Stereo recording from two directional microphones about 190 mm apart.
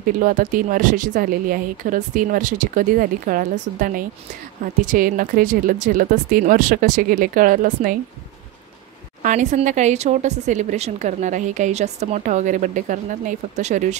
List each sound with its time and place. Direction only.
0.2 s a woman's voice: 45° right (ahead or behind)
9.2 s speech: 40° right (ahead or behind)